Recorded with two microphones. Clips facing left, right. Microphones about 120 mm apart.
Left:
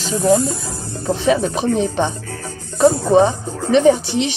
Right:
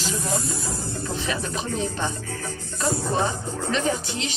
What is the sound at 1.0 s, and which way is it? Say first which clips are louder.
Speech: left 14 dB; 75° left (ahead or behind).